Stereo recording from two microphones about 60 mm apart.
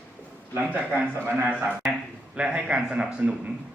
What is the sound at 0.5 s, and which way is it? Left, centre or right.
A man's voice, centre.